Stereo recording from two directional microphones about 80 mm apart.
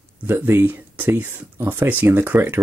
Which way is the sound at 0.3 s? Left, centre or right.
Right.